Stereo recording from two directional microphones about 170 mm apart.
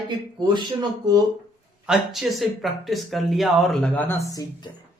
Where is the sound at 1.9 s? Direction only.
Centre (ahead or behind).